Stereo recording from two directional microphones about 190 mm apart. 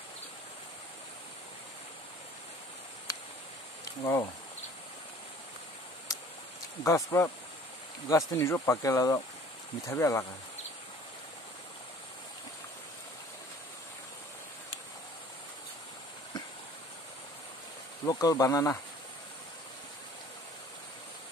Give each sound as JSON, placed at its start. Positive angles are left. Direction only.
{"t": 3.1, "sound": "a sound", "side_deg": 15}
{"t": 4.0, "sound": "speech", "side_deg": 15}
{"t": 6.8, "sound": "speech", "side_deg": 15}
{"t": 18.0, "sound": "speech", "side_deg": 20}